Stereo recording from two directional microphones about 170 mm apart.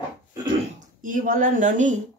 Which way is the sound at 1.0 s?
55° right (ahead or behind).